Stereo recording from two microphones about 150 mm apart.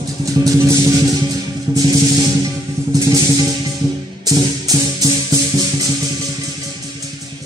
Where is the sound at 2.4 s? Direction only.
25° right (ahead or behind).